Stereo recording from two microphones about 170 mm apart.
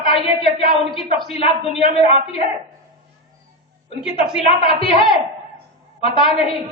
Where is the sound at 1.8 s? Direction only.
35° left (ahead or behind).